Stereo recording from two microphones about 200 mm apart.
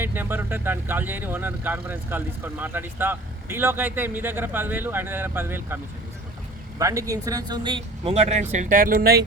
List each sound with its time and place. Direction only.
0.0 s speech: 10° right (ahead or behind); by 9.2 s 50° right (ahead or behind)